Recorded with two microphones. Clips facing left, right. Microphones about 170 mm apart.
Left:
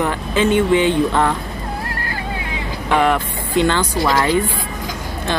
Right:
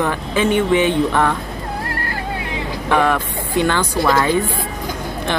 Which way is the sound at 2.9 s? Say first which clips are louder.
Left 1 dB; 20° left (ahead or behind).